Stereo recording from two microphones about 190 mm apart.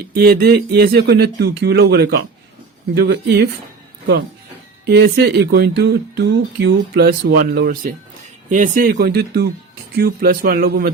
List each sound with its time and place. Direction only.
0.1 s speech: 55° right (ahead or behind)
4.9 s speech: 60° right (ahead or behind)